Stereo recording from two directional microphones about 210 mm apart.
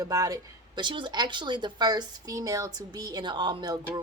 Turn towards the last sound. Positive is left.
turn(degrees=-20)  # may be behind; listen again after turning